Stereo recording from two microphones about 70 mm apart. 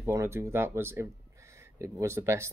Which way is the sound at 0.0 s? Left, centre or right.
Right.